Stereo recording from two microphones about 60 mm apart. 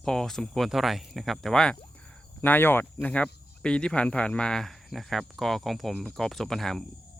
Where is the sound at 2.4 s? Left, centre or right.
Left.